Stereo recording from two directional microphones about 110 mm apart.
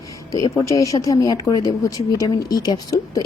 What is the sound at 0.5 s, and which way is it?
Speech, 30° left (ahead or behind).